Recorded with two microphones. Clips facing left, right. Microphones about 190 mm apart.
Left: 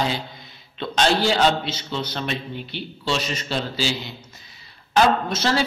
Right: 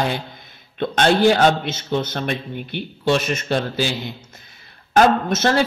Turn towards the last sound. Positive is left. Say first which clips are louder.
# right 4 dB
turn(degrees=-50)  # may be behind; listen again after turning